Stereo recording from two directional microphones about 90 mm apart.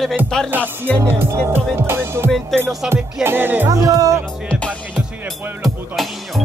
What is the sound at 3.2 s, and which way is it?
Music, 20° right (ahead or behind).